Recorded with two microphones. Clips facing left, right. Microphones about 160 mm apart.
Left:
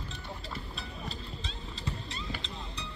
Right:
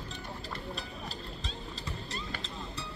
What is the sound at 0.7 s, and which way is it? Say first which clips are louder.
Boat: right 1 dB; centre (ahead or behind).